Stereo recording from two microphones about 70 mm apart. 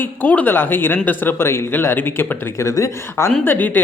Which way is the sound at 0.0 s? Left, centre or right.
Left.